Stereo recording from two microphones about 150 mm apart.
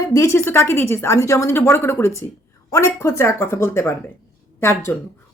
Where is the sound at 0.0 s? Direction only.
20° left (ahead or behind).